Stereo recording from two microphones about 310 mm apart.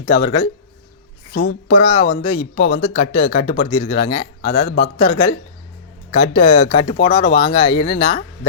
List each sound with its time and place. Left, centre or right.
0.0 s speech: centre
1.4 s speech: left